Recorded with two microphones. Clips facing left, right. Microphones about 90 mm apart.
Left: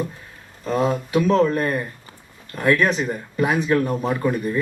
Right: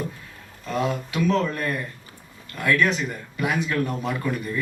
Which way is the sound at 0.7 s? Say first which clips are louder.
Left 6 dB; 35° left (ahead or behind).